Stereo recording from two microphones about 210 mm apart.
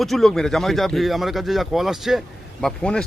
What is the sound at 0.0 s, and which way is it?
Speech, centre (ahead or behind).